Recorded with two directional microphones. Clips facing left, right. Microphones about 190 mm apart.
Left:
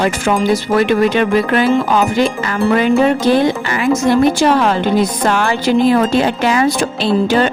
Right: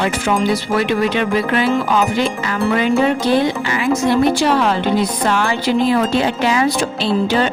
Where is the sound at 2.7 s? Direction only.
50° left (ahead or behind).